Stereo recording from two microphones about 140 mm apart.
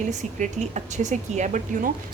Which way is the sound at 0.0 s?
60° right (ahead or behind).